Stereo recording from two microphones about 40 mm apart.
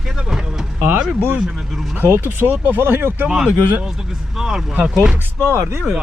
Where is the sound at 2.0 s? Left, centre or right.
Right.